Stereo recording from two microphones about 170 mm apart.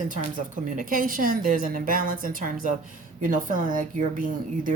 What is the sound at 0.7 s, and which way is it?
A woman's voice, 50° right (ahead or behind).